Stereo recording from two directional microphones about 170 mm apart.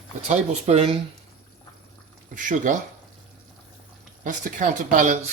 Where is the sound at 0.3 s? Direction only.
40° right (ahead or behind).